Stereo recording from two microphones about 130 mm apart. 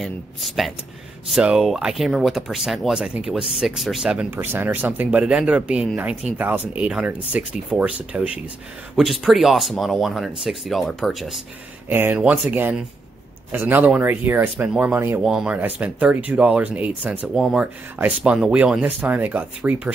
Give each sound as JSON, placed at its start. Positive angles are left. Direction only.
{"t": 0.0, "sound": "speech", "side_deg": 0}
{"t": 11.9, "sound": "speech", "side_deg": -15}